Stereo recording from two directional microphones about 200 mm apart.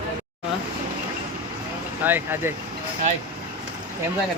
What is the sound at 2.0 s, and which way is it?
Speech, 10° right (ahead or behind).